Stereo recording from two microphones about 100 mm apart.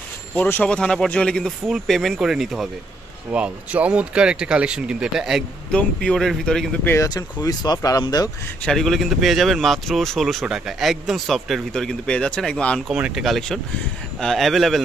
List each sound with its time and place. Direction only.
0.3 s speech: 15° left (ahead or behind); by 5.4 s 5° right (ahead or behind)
5.7 s speech: 10° left (ahead or behind)
7.0 s speech: 35° left (ahead or behind)
8.6 s speech: 5° left (ahead or behind)
12.9 s speech: 15° right (ahead or behind)
13.2 s speech: centre (ahead or behind)